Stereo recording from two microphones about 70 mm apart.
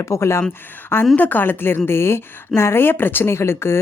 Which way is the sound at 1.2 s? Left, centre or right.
Left.